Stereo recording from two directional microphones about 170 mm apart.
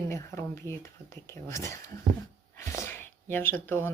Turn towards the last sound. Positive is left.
turn(degrees=10)  # may be behind; listen again after turning